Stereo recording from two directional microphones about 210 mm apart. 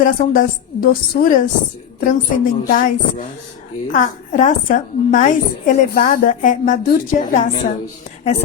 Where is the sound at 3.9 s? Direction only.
40° left (ahead or behind).